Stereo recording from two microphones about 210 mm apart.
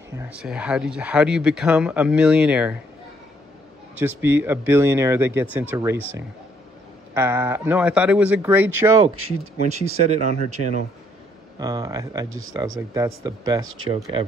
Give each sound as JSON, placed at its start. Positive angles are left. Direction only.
{"t": 0.2, "sound": "speech", "side_deg": -5}
{"t": 4.0, "sound": "speech", "side_deg": -10}
{"t": 7.2, "sound": "speech", "side_deg": -10}
{"t": 9.7, "sound": "speech", "side_deg": -30}
{"t": 11.5, "sound": "speech", "side_deg": -15}
{"t": 12.3, "sound": "speech", "side_deg": -75}
{"t": 12.7, "sound": "speech", "side_deg": -15}